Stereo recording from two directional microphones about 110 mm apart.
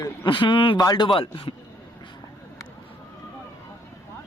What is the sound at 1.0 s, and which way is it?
Speech, 55° left (ahead or behind).